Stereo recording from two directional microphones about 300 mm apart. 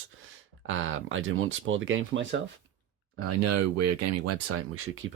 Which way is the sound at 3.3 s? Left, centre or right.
Right.